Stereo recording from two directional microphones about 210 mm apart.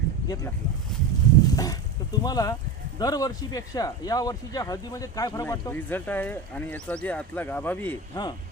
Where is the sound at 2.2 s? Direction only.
20° left (ahead or behind).